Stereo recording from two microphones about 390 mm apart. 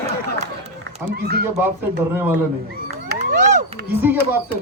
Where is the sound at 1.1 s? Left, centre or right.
Right.